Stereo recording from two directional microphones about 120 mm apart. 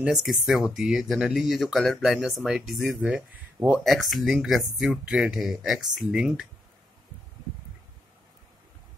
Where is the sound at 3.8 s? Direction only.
Centre (ahead or behind).